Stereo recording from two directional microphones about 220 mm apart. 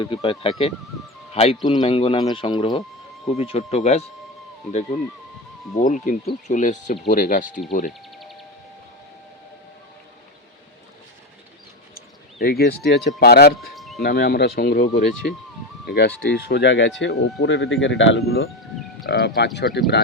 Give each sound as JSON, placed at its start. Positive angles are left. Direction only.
{"t": 0.0, "sound": "speech", "side_deg": 25}
{"t": 5.7, "sound": "speech", "side_deg": 35}
{"t": 11.9, "sound": "speech", "side_deg": 45}
{"t": 13.7, "sound": "a sound", "side_deg": 0}
{"t": 14.0, "sound": "speech", "side_deg": 45}
{"t": 19.0, "sound": "speech", "side_deg": 45}